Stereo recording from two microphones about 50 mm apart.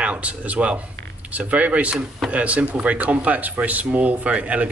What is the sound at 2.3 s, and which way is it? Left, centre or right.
Speech, right.